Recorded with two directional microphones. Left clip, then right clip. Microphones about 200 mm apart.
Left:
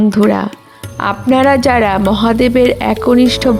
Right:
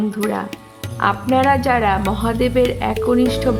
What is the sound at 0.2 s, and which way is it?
Speech, 45° left (ahead or behind).